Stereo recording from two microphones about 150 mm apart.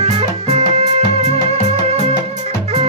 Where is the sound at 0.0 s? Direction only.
45° right (ahead or behind).